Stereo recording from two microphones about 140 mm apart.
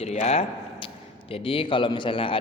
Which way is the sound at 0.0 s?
50° left (ahead or behind).